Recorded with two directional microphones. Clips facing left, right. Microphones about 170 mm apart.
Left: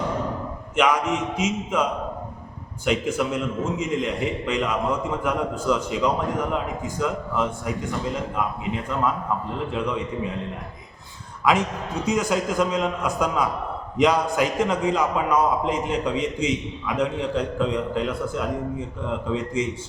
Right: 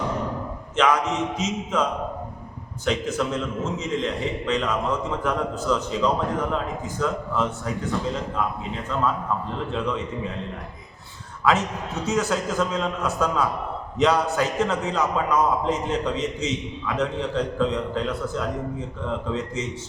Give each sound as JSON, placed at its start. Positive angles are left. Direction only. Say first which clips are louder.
{"t": 0.8, "sound": "a man's voice", "louder": "even", "side_deg": 10}
{"t": 12.0, "sound": "a man's voice", "louder": "left 1 dB", "side_deg": 15}
{"t": 19.6, "sound": "a man's voice", "louder": "left 5 dB", "side_deg": 10}